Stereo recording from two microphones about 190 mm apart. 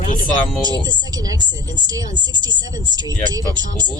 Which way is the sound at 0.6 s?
20° right (ahead or behind).